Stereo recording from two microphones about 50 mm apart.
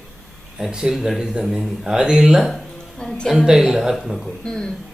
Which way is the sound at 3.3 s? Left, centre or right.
Centre.